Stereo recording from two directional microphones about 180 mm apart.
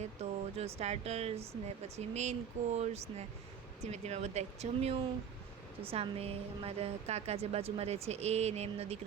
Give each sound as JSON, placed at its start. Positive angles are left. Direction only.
{"t": 0.0, "sound": "a woman's voice", "side_deg": -35}